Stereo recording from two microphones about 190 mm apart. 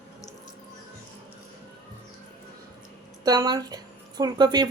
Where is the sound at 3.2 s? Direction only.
20° right (ahead or behind).